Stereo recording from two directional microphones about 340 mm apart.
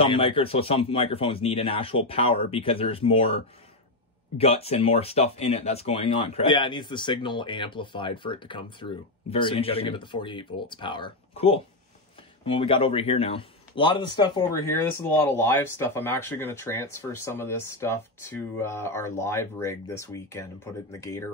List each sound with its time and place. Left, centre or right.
0.0 s speech: centre
4.4 s speech: centre